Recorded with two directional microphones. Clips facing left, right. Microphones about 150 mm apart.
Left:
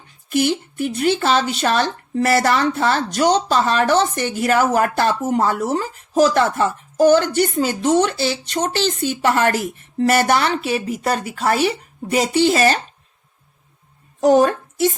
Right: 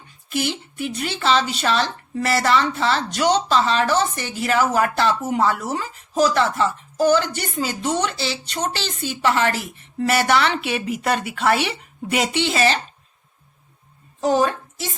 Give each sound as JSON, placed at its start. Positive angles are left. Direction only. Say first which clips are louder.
{"t": 0.3, "sound": "speech", "louder": "left 6 dB", "side_deg": 50}
{"t": 14.2, "sound": "a woman's voice", "louder": "left 5 dB", "side_deg": 50}